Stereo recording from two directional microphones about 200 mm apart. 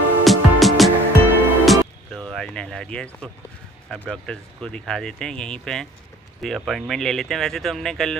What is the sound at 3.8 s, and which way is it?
Speech, 5° left (ahead or behind).